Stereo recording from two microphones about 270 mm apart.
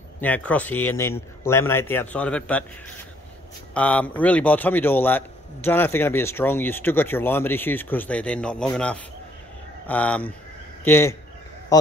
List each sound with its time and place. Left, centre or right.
0.2 s a man's voice: centre
3.7 s a man's voice: centre
11.7 s a sound: centre